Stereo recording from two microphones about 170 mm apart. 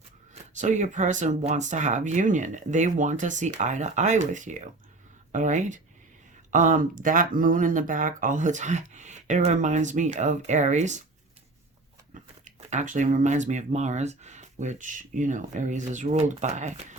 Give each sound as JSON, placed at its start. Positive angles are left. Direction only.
{"t": 0.6, "sound": "speech", "side_deg": -45}
{"t": 12.1, "sound": "speech", "side_deg": -45}